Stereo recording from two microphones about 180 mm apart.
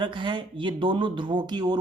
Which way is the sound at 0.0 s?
25° right (ahead or behind).